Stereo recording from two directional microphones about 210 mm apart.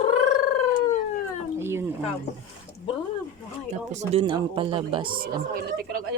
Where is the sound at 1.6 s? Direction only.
10° right (ahead or behind).